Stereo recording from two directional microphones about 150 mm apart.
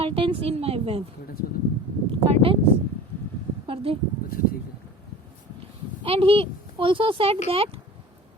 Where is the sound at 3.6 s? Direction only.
40° right (ahead or behind).